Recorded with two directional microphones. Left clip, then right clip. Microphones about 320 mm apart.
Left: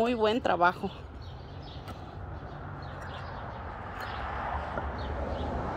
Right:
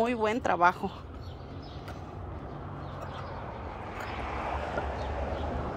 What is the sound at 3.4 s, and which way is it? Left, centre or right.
Vehicle, right.